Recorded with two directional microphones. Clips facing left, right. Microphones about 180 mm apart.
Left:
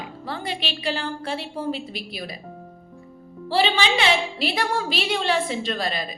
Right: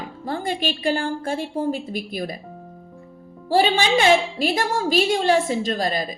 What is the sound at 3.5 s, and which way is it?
A woman's voice, 45° right (ahead or behind).